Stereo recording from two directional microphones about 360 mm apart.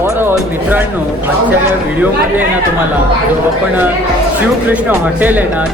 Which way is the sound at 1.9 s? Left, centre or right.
Centre.